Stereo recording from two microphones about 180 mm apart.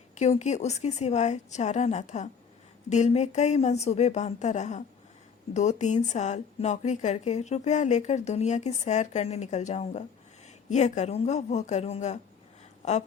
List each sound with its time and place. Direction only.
0.1 s speech: 40° left (ahead or behind)